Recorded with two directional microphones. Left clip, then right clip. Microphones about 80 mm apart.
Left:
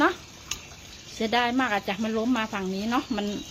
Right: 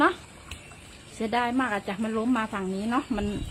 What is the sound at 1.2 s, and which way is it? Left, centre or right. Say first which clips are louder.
Speech: left 2 dB; left.